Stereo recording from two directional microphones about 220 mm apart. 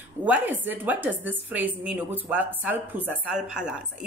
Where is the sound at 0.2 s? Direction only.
5° right (ahead or behind).